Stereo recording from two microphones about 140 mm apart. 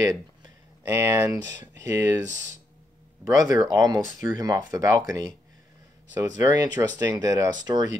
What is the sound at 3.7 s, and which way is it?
Speech, 25° right (ahead or behind).